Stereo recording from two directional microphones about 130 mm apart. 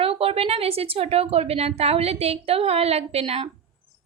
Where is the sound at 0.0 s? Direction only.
50° right (ahead or behind).